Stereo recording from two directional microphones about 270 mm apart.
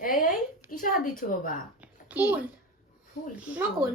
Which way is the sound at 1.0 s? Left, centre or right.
Left.